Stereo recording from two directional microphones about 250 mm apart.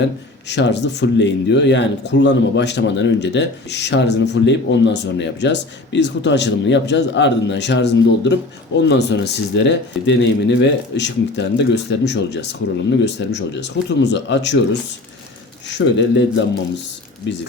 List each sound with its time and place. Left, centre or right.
0.0 s speech: left